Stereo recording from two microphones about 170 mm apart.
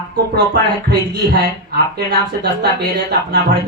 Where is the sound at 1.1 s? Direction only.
70° right (ahead or behind).